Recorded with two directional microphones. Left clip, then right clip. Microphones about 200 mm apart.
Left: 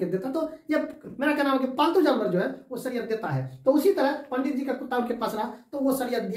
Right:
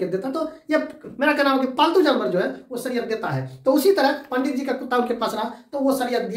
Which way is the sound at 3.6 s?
20° right (ahead or behind).